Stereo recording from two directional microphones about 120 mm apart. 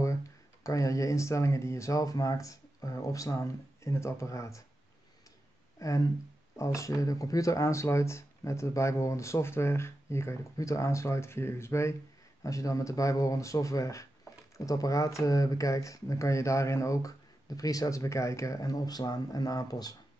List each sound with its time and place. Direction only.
0.7 s speech: 25° left (ahead or behind)
5.8 s speech: 30° left (ahead or behind)